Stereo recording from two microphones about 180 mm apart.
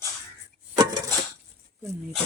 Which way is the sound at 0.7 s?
20° right (ahead or behind).